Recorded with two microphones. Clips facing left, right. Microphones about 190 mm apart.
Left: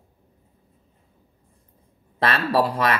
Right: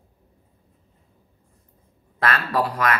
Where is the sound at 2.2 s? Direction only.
30° left (ahead or behind).